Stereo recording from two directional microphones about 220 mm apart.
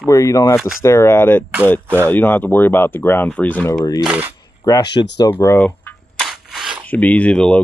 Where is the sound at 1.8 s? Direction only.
10° right (ahead or behind).